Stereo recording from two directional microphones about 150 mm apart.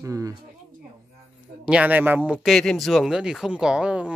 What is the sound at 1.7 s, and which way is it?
A man's voice, 10° right (ahead or behind).